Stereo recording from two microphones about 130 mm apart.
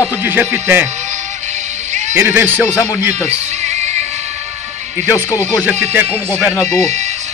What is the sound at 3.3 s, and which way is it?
Music, 60° right (ahead or behind).